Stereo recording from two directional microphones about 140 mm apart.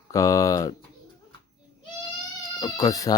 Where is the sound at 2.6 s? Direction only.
25° left (ahead or behind).